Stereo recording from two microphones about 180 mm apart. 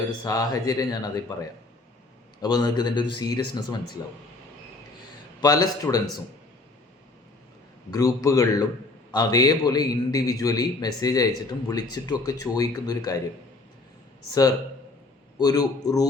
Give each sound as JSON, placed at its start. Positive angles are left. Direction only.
{"t": 0.3, "sound": "a man's voice", "side_deg": 20}
{"t": 5.4, "sound": "a man's voice", "side_deg": 20}
{"t": 7.9, "sound": "a man's voice", "side_deg": 20}
{"t": 15.4, "sound": "a man's voice", "side_deg": 20}